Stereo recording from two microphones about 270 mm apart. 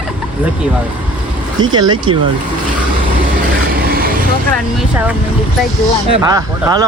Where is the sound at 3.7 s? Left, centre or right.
Right.